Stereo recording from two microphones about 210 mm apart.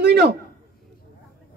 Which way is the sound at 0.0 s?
50° right (ahead or behind).